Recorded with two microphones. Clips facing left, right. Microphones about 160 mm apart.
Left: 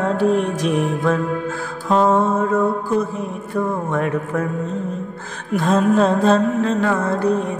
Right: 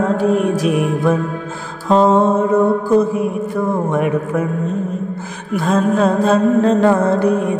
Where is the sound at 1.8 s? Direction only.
25° right (ahead or behind).